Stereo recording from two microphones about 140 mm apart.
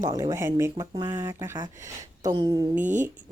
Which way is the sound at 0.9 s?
30° right (ahead or behind).